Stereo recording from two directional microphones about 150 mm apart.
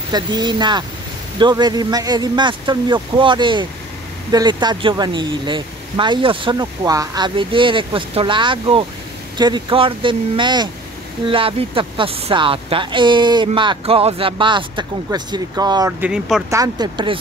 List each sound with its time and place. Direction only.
0.1 s speech: 30° right (ahead or behind)
16.0 s speech: 5° right (ahead or behind)
16.4 s speech: 20° right (ahead or behind)